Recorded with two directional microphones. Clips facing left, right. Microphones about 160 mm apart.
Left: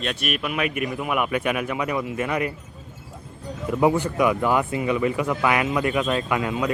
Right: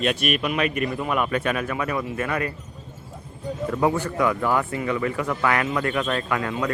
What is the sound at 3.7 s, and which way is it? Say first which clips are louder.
Speech: left 3 dB; 15° left (ahead or behind).